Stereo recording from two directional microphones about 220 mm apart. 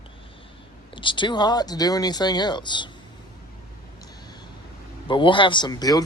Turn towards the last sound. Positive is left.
turn(degrees=15)  # may be behind; listen again after turning